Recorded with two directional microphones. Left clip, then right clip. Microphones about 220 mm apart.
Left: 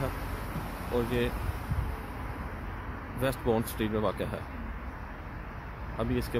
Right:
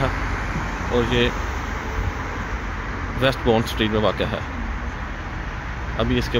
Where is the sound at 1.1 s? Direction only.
5° left (ahead or behind).